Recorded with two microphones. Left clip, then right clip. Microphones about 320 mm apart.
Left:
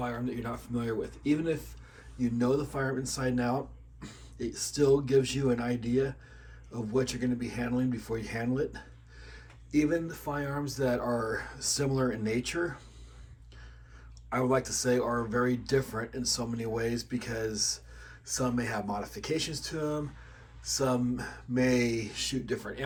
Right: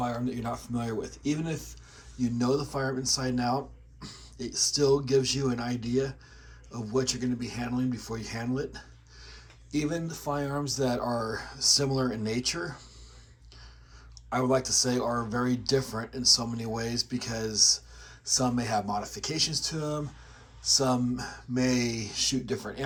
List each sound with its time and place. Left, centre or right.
0.0 s speech: centre
14.3 s speech: centre